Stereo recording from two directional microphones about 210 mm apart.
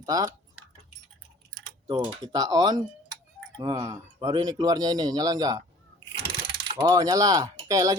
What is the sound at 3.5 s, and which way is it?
Speech, 20° right (ahead or behind).